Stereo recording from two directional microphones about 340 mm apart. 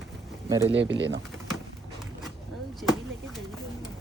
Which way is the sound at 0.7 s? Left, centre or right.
Right.